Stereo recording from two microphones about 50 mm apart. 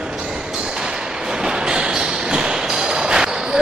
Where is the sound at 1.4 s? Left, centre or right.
Centre.